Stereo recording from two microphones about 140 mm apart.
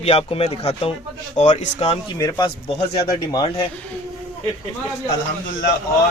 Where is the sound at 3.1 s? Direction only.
30° left (ahead or behind).